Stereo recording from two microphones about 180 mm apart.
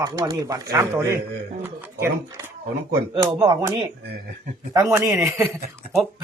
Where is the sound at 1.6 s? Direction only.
10° right (ahead or behind).